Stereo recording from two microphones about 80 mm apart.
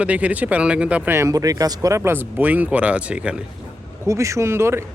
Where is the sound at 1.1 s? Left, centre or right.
Right.